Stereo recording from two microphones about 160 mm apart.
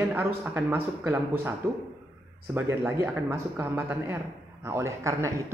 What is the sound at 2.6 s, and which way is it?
Speech, 15° right (ahead or behind).